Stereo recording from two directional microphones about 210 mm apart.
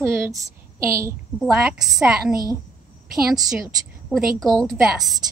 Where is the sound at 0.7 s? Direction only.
15° right (ahead or behind).